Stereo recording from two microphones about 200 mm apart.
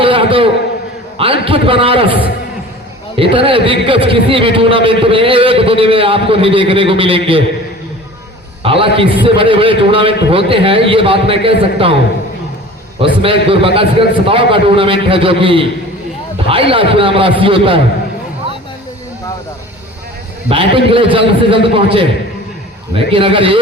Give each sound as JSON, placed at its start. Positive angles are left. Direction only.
{"t": 0.0, "sound": "a sound", "side_deg": -25}
{"t": 1.2, "sound": "a man's voice", "side_deg": -25}
{"t": 8.6, "sound": "a man's voice", "side_deg": -25}
{"t": 13.2, "sound": "a man's voice", "side_deg": -25}
{"t": 20.5, "sound": "a man's voice", "side_deg": -25}
{"t": 23.1, "sound": "a man's voice", "side_deg": -25}